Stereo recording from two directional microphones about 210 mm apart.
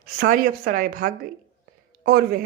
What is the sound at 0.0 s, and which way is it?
Speech, 45° right (ahead or behind).